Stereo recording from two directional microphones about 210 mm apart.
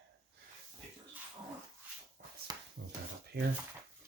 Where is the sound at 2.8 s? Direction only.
60° right (ahead or behind).